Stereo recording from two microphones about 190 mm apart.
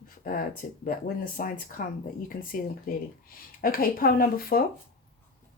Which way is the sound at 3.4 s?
50° left (ahead or behind).